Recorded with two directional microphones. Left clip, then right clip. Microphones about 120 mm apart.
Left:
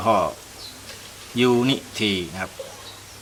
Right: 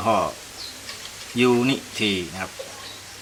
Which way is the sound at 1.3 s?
20° left (ahead or behind).